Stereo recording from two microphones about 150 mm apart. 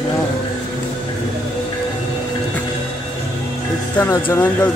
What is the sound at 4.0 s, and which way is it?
Speech, 15° left (ahead or behind).